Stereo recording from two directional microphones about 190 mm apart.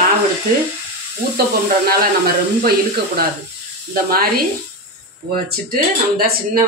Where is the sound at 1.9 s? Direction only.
50° right (ahead or behind).